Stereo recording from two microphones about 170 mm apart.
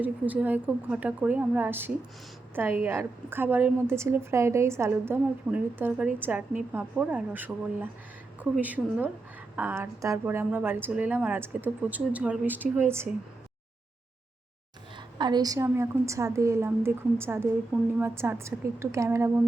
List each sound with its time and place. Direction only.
0.0 s a woman's voice: 10° right (ahead or behind)
14.9 s a woman's voice: 25° right (ahead or behind)